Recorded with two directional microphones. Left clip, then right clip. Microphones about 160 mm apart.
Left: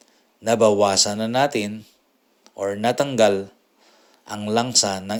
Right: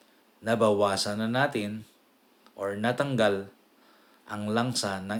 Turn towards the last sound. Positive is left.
turn(degrees=40)  # may be behind; listen again after turning